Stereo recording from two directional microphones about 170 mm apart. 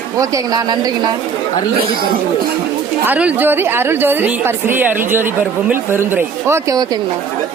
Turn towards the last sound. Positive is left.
turn(degrees=-15)  # may be behind; listen again after turning